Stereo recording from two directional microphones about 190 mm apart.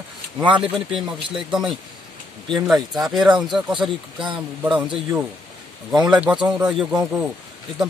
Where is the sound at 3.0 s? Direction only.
Centre (ahead or behind).